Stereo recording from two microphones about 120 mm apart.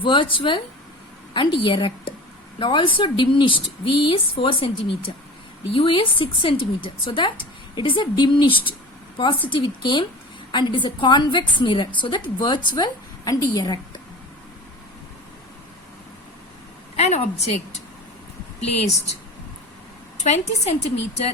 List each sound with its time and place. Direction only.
0.0 s a woman's voice: 45° left (ahead or behind)
17.0 s speech: 65° left (ahead or behind)
20.1 s speech: 70° left (ahead or behind)